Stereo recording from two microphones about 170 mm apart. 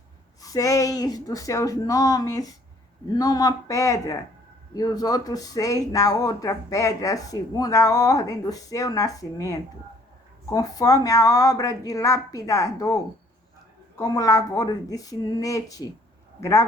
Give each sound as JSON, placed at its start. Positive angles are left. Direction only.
{"t": 0.4, "sound": "speech", "side_deg": 20}
{"t": 14.0, "sound": "speech", "side_deg": 20}